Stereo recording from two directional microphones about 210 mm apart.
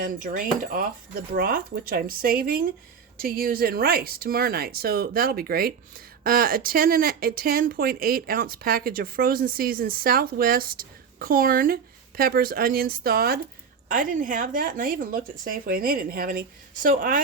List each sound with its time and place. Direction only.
0.0 s speech: 40° right (ahead or behind)